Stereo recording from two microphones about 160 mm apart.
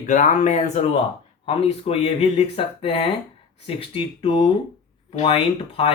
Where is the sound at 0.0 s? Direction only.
50° left (ahead or behind).